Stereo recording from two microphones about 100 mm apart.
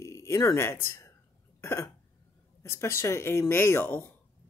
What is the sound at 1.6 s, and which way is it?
Cough, 30° left (ahead or behind).